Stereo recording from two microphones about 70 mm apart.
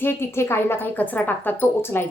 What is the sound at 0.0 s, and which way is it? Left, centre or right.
Speech, left.